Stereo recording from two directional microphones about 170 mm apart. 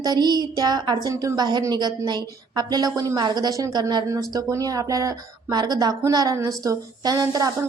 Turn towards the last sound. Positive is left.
turn(degrees=-20)  # may be behind; listen again after turning